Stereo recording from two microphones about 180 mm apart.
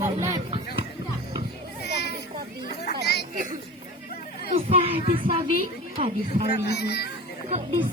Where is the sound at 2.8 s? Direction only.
65° left (ahead or behind).